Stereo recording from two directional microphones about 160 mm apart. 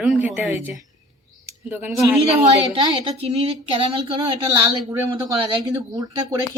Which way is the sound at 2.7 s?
30° right (ahead or behind).